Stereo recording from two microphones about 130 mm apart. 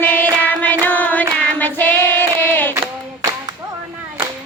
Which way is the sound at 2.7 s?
20° right (ahead or behind).